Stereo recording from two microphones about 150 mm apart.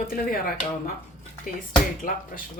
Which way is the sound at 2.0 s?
70° left (ahead or behind).